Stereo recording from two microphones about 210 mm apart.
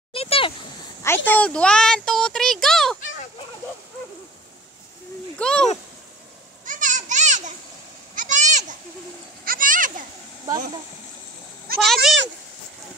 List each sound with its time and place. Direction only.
0.1 s a sound: 25° left (ahead or behind)
1.0 s a child's voice: 10° left (ahead or behind)
5.4 s speech: 5° left (ahead or behind)
6.6 s children playing: 40° right (ahead or behind)
8.2 s goat: 35° right (ahead or behind)
9.4 s a child's voice: 40° right (ahead or behind)
11.8 s speech: centre (ahead or behind)